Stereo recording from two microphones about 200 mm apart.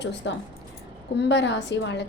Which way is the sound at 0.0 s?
60° left (ahead or behind).